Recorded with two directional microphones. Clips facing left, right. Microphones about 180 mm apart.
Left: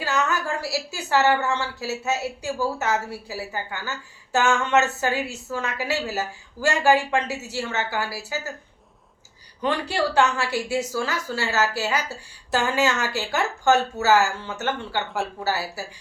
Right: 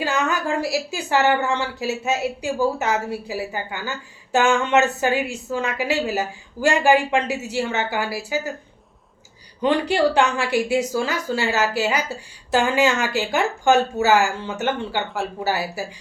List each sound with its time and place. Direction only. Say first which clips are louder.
0.0 s a woman's voice: right 2 dB; 15° right (ahead or behind)
9.6 s a woman's voice: right 5 dB; 20° right (ahead or behind)